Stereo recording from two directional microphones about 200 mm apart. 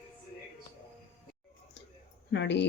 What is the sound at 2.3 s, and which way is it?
Speech, 60° left (ahead or behind).